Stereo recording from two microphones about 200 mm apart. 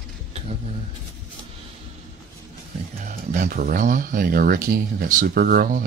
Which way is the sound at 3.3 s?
45° right (ahead or behind).